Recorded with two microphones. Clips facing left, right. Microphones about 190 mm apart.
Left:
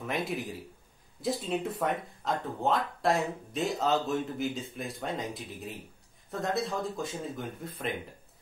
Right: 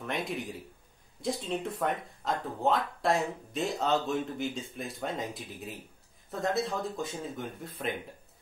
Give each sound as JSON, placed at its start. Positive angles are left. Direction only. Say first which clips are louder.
{"t": 0.0, "sound": "speech", "louder": "left 1 dB", "side_deg": 0}